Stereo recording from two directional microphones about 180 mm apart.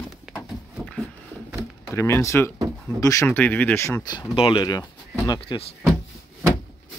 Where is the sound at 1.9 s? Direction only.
15° left (ahead or behind).